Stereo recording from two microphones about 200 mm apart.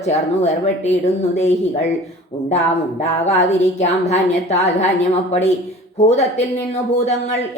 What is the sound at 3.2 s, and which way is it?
A woman's voice, 35° left (ahead or behind).